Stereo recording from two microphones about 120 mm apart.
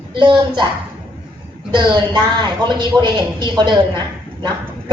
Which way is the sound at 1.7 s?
40° right (ahead or behind).